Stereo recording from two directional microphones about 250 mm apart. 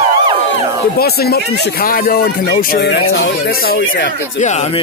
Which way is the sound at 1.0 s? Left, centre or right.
Left.